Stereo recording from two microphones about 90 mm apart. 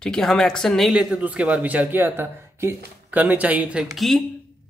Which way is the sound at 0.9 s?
10° right (ahead or behind).